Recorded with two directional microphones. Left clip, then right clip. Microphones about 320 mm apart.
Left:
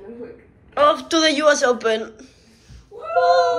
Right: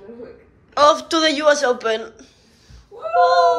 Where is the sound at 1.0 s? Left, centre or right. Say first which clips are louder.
Even; centre.